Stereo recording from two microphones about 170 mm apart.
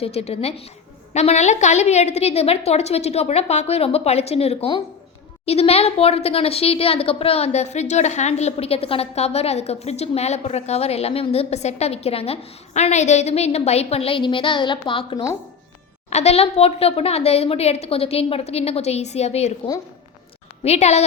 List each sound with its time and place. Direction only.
0.0 s a woman's voice: 35° left (ahead or behind)
16.0 s a woman's voice: 40° left (ahead or behind)
20.7 s a woman's voice: 40° left (ahead or behind)